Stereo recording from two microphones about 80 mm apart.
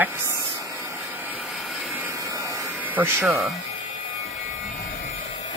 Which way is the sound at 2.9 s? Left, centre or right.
Right.